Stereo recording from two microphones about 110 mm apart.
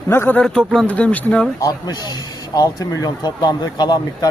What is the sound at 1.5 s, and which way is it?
A man's voice, 35° left (ahead or behind).